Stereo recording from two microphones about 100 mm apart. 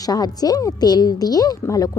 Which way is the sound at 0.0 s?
40° left (ahead or behind).